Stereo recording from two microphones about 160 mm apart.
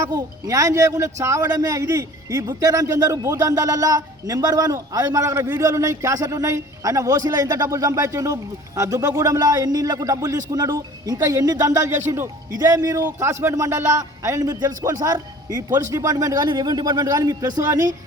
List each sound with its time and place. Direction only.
0.0 s speech: 25° right (ahead or behind)